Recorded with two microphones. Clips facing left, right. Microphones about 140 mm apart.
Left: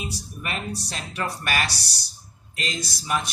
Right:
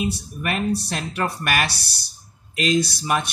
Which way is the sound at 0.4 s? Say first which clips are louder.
Right 8 dB; 60° right (ahead or behind).